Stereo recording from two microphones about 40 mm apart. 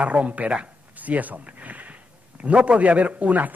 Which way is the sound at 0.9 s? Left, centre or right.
Right.